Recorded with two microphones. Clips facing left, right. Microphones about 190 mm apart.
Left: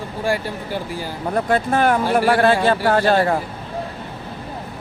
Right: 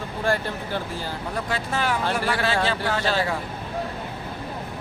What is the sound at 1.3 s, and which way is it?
Speech, 55° left (ahead or behind).